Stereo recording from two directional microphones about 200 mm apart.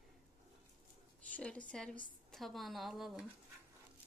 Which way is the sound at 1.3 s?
5° left (ahead or behind).